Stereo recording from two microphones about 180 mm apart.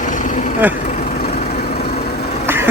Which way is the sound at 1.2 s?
60° left (ahead or behind).